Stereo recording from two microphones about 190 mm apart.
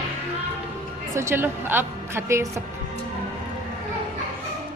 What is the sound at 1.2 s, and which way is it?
Speech, 10° right (ahead or behind).